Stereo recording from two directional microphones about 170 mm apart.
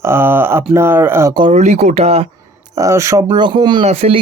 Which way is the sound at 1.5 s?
40° right (ahead or behind).